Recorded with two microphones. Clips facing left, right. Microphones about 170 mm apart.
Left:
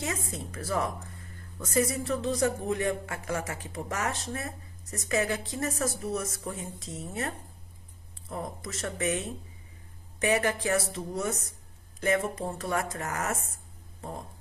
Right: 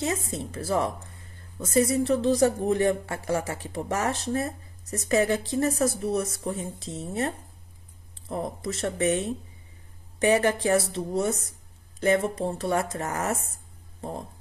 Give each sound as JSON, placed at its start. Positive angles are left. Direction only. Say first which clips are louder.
{"t": 0.0, "sound": "a woman's voice", "louder": "right 5 dB", "side_deg": -30}